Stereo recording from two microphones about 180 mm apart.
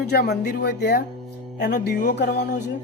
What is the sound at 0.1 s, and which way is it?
Speech, 65° left (ahead or behind).